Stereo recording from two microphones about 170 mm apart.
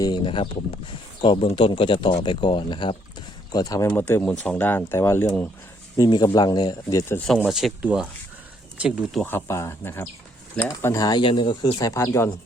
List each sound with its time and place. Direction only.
0.0 s speech: 30° left (ahead or behind)
6.0 s speech: 25° left (ahead or behind)
7.3 s speech: centre (ahead or behind)
9.2 s speech: 15° left (ahead or behind)